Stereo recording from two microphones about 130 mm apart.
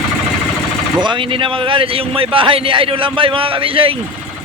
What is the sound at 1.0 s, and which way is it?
A man's voice, 40° right (ahead or behind).